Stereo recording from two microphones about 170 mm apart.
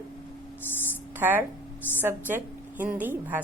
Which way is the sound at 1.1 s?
10° right (ahead or behind).